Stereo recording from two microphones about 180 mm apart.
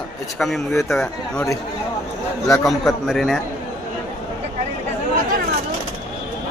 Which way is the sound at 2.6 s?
Centre (ahead or behind).